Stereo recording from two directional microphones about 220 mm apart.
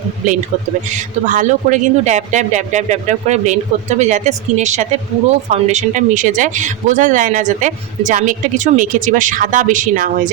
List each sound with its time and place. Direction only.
0.9 s speech: 35° right (ahead or behind)